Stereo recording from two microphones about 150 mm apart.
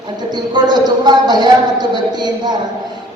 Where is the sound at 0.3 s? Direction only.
30° right (ahead or behind).